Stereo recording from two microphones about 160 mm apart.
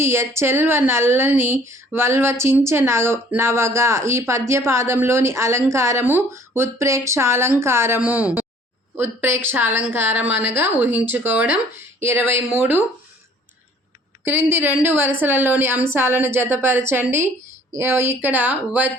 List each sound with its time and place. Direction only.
0.0 s a woman's voice: 15° right (ahead or behind)
14.5 s a woman's voice: 10° right (ahead or behind)